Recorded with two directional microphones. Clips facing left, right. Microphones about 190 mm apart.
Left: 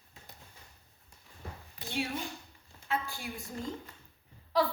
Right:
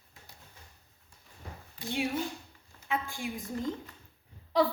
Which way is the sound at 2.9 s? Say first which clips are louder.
Right 2 dB; 15° right (ahead or behind).